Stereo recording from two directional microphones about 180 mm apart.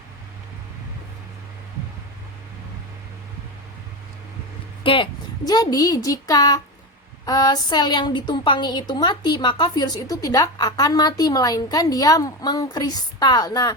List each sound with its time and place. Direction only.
4.8 s a woman's voice: 30° left (ahead or behind)